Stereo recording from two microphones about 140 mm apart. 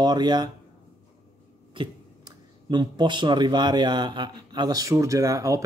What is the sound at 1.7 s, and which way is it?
Speech, 35° right (ahead or behind).